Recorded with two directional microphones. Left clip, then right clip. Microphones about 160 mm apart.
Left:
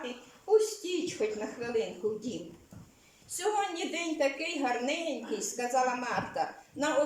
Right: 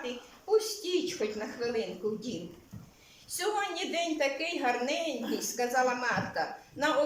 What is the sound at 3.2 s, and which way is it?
A woman's voice, 15° left (ahead or behind).